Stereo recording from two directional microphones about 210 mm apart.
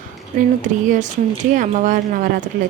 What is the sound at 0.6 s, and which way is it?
A woman's voice, 35° right (ahead or behind).